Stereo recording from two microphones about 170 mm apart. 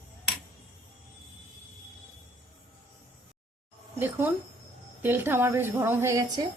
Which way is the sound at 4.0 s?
10° right (ahead or behind).